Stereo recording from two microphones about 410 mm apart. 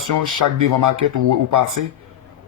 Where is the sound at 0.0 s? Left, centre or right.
Right.